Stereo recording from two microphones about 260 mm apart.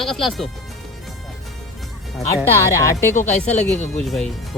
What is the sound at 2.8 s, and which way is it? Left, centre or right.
Speech, centre.